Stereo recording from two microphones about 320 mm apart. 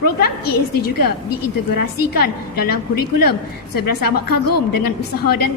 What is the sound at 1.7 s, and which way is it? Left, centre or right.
A woman's voice, left.